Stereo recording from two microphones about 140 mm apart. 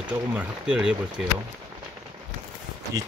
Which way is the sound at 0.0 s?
10° right (ahead or behind).